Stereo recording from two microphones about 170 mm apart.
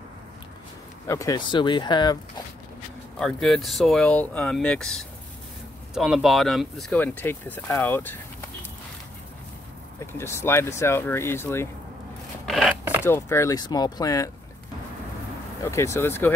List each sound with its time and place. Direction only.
1.0 s speech: 20° left (ahead or behind)
3.2 s speech: centre (ahead or behind)
9.9 s speech: 15° left (ahead or behind)
12.4 s a sound: centre (ahead or behind)
13.0 s speech: 15° left (ahead or behind)
15.6 s speech: 15° left (ahead or behind)